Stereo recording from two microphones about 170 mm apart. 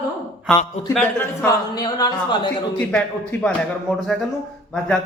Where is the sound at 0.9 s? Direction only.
10° left (ahead or behind).